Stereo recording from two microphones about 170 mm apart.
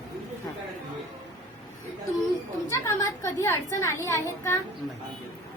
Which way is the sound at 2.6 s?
15° left (ahead or behind).